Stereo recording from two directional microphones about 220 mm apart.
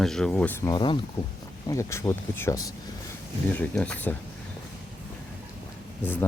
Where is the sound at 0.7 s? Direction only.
20° left (ahead or behind).